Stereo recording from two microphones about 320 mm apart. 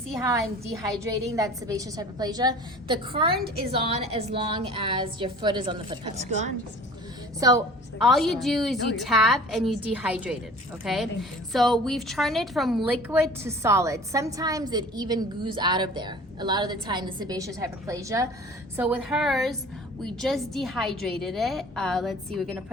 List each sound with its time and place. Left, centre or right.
1.0 s a woman's voice: centre
7.3 s a woman's voice: centre
8.0 s a woman's voice: centre